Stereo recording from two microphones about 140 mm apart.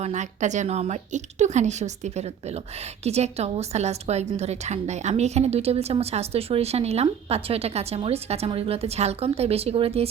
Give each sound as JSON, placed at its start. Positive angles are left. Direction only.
{"t": 0.0, "sound": "a woman's voice", "side_deg": -55}